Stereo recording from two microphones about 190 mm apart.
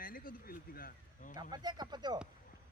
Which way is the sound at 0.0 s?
50° left (ahead or behind).